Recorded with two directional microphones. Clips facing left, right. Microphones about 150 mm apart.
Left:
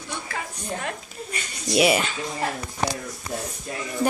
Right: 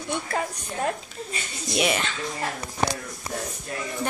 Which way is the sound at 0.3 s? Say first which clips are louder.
Right 2 dB; 35° right (ahead or behind).